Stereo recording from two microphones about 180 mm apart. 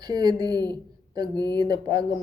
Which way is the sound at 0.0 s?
25° right (ahead or behind).